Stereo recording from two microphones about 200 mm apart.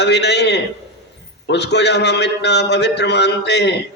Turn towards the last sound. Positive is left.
turn(degrees=60)  # may be behind; listen again after turning